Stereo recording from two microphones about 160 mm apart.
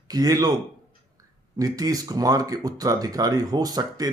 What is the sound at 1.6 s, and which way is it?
Speech, 20° right (ahead or behind).